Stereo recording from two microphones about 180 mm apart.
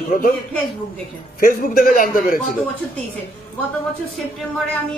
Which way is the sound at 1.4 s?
50° left (ahead or behind).